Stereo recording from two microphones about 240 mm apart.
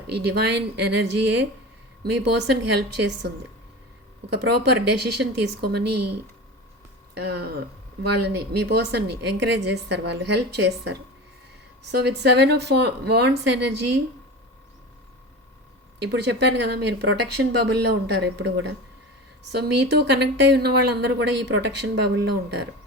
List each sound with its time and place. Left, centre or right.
0.1 s speech: right
7.1 s speech: right
16.0 s speech: right